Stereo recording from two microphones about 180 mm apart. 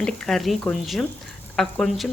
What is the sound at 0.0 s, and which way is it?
Speech, 5° left (ahead or behind).